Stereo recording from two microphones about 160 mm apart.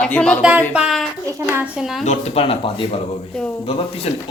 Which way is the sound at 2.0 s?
45° left (ahead or behind).